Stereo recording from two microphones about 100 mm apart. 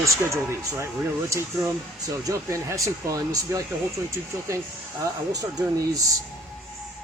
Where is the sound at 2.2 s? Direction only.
30° right (ahead or behind).